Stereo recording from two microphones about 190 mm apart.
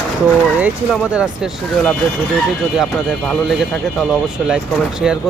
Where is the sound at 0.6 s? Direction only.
5° right (ahead or behind).